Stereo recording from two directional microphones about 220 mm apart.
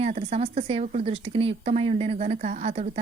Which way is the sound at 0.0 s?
30° right (ahead or behind).